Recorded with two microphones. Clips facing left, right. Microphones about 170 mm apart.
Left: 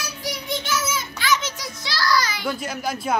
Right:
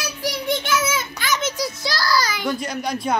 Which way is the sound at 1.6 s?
35° right (ahead or behind).